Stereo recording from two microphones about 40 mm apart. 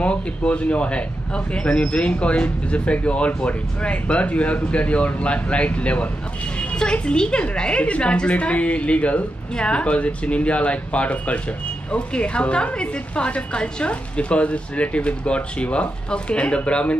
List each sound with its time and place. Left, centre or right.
0.0 s speech: left
6.8 s a woman's voice: left